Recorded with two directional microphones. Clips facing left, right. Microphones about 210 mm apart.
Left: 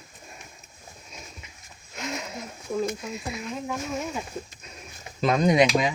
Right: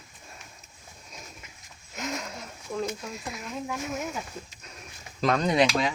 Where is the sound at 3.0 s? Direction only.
5° left (ahead or behind).